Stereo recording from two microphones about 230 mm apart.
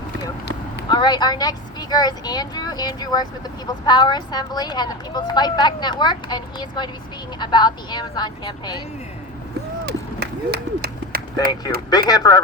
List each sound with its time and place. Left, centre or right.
0.9 s speech: centre
9.8 s a sound: right
11.9 s speech: centre